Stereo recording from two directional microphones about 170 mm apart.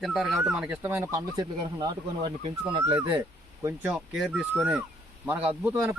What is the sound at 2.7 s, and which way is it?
Speech, 30° right (ahead or behind).